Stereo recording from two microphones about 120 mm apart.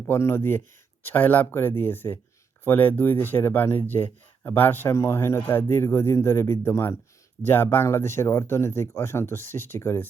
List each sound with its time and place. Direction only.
0.0 s a man's voice: 20° left (ahead or behind)